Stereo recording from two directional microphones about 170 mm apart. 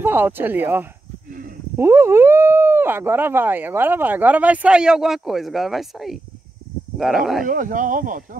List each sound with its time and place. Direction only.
0.0 s speech: 10° right (ahead or behind)
7.4 s speech: 50° right (ahead or behind)